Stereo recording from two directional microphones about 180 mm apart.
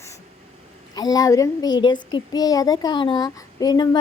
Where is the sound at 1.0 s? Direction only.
20° left (ahead or behind).